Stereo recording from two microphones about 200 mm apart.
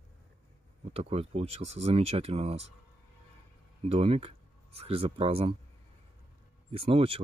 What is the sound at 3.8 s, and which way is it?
Speech, 30° right (ahead or behind).